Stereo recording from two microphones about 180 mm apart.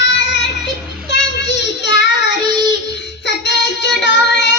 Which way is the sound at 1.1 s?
75° left (ahead or behind).